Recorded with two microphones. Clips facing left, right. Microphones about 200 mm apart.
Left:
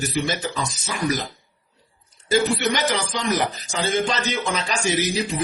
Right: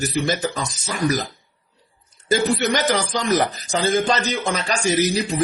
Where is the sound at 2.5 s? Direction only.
45° right (ahead or behind).